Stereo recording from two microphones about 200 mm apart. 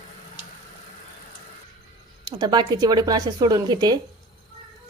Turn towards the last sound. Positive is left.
turn(degrees=-20)  # may be behind; listen again after turning